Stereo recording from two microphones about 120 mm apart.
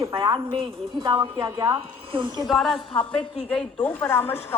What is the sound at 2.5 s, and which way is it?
A woman's voice, centre (ahead or behind).